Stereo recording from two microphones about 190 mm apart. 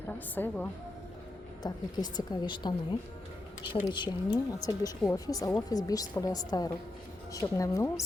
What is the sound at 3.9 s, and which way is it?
A woman's voice, 25° left (ahead or behind).